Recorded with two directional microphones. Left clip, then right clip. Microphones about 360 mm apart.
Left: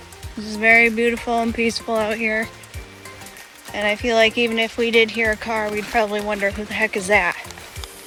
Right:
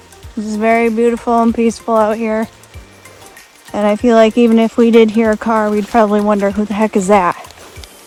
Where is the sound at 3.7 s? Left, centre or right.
Right.